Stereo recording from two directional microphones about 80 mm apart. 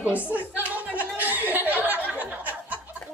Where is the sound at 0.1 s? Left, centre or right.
Centre.